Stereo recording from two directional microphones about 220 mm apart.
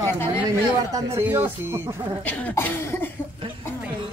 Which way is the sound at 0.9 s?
10° right (ahead or behind).